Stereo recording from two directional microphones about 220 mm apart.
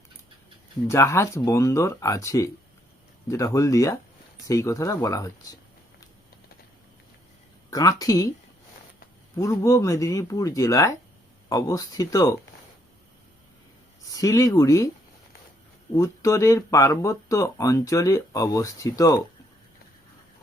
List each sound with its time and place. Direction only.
0.9 s speech: 15° left (ahead or behind)
7.7 s speech: 15° left (ahead or behind)
9.3 s speech: 15° left (ahead or behind)
14.1 s speech: 15° left (ahead or behind)
16.0 s speech: 15° left (ahead or behind)